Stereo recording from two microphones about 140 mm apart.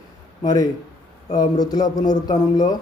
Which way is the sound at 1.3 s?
30° left (ahead or behind).